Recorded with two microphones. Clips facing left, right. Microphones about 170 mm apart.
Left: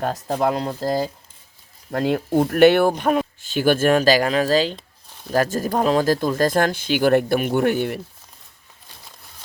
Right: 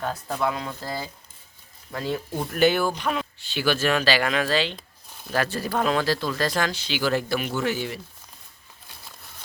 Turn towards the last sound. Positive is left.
turn(degrees=55)  # may be behind; listen again after turning